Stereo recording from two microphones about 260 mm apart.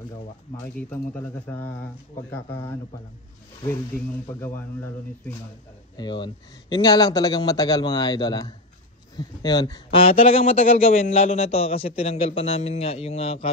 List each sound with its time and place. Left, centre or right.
0.7 s a man's voice: centre
4.3 s a man's voice: centre